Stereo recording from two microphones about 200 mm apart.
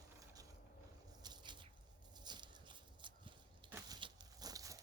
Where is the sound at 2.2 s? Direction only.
20° right (ahead or behind).